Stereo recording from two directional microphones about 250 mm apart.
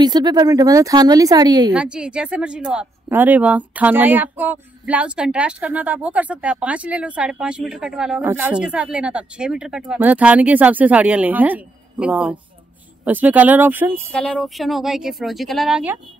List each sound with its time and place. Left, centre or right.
0.0 s speech: centre
1.7 s speech: centre
14.1 s speech: centre